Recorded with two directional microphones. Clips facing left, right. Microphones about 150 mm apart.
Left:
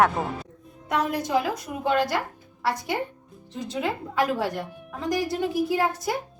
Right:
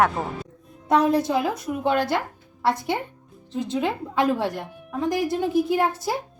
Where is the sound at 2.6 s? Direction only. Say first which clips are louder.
Right 4 dB; 25° right (ahead or behind).